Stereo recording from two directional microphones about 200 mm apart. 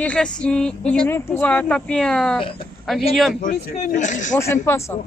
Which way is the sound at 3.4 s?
40° left (ahead or behind).